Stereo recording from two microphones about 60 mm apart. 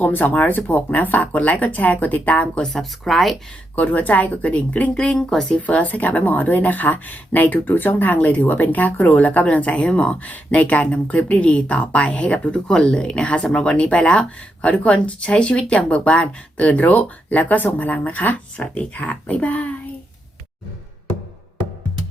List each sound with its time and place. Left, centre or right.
0.0 s speech: left
2.6 s speech: centre
3.8 s speech: left; by 5.5 s centre
5.5 s speech: left